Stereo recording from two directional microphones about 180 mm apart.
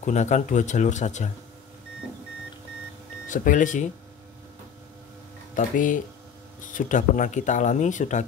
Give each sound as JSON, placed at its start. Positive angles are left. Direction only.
{"t": 0.0, "sound": "speech", "side_deg": 40}
{"t": 3.3, "sound": "speech", "side_deg": 45}
{"t": 5.5, "sound": "speech", "side_deg": 45}